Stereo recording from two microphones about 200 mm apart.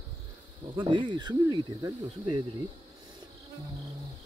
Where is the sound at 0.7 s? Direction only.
25° right (ahead or behind).